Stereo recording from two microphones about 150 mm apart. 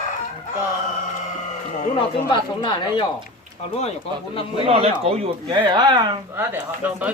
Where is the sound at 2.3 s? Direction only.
35° left (ahead or behind).